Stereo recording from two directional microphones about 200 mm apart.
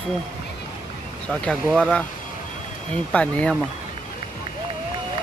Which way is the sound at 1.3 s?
5° left (ahead or behind).